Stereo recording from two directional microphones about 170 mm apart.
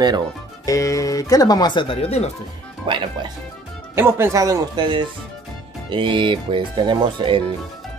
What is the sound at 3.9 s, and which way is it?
Speech, 15° right (ahead or behind).